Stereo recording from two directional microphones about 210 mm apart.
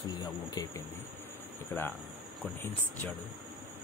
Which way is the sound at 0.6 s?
20° left (ahead or behind).